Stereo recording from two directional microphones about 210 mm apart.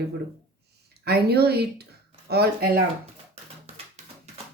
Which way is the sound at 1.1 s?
50° right (ahead or behind).